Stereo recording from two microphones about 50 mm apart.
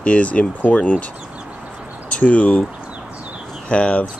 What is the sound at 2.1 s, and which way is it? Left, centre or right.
Speech, left.